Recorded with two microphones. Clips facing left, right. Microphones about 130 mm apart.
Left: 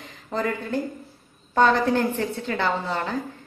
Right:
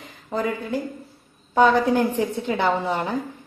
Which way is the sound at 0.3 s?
10° right (ahead or behind).